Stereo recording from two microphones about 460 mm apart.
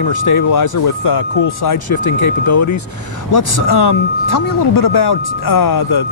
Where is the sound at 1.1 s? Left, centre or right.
Left.